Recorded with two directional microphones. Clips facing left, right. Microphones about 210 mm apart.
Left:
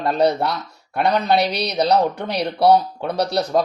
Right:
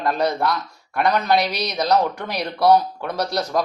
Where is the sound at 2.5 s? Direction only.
25° left (ahead or behind).